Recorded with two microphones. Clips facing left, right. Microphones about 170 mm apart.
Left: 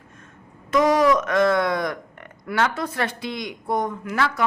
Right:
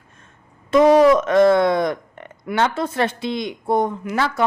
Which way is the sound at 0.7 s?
25° right (ahead or behind).